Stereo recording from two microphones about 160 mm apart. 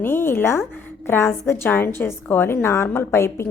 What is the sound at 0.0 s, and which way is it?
A woman's voice, 15° left (ahead or behind).